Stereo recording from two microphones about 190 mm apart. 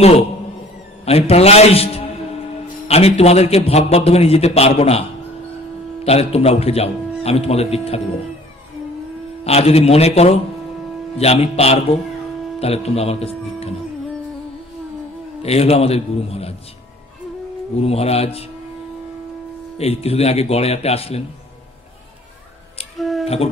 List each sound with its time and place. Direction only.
1.0 s a man's voice: 30° left (ahead or behind)
6.0 s a man's voice: 35° left (ahead or behind)
9.4 s a man's voice: 35° left (ahead or behind)
15.4 s a man's voice: 30° left (ahead or behind)
17.7 s a man's voice: 30° left (ahead or behind)
19.8 s a man's voice: 30° left (ahead or behind)
22.9 s a sound: centre (ahead or behind)
23.2 s a sound: 30° left (ahead or behind)